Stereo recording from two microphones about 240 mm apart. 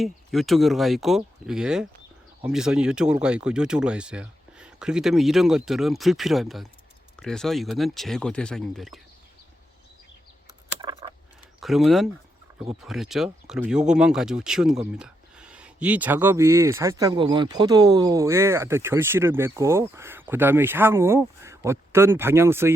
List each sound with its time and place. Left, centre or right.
0.0 s speech: centre
10.8 s typing: centre
11.6 s speech: centre